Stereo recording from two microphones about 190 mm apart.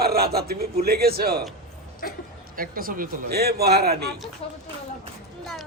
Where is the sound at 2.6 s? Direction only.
50° right (ahead or behind).